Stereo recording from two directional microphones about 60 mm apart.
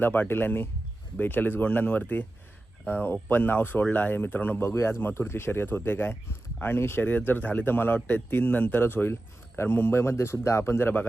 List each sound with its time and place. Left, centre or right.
0.0 s speech: left
4.6 s speech: left